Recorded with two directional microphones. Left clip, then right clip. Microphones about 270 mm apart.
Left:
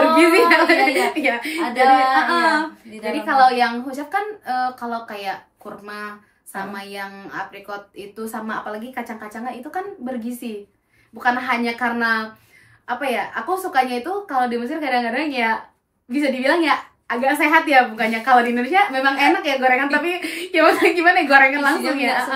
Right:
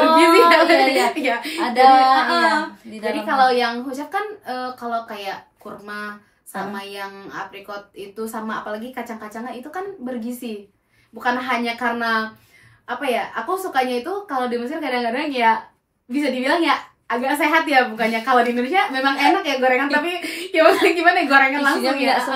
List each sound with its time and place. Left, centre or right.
0.1 s a sound: centre
1.2 s a woman's voice: centre
1.6 s female singing: right
2.1 s a woman's voice: centre
2.4 s female singing: right
3.3 s a woman's voice: centre